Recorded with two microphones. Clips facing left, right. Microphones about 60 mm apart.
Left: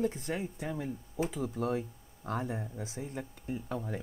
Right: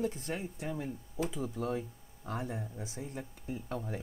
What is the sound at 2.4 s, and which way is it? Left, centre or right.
Speech, left.